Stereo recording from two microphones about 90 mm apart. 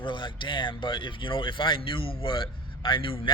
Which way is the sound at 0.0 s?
65° left (ahead or behind).